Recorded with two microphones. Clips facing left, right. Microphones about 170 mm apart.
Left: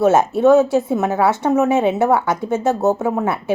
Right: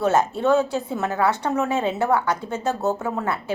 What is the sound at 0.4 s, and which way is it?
A woman's voice, 20° left (ahead or behind).